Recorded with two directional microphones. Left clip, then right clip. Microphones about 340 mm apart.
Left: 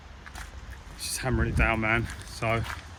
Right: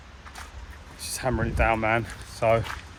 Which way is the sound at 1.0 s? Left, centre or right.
Centre.